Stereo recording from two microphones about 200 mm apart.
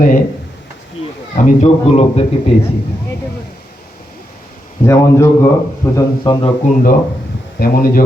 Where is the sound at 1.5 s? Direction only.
30° left (ahead or behind).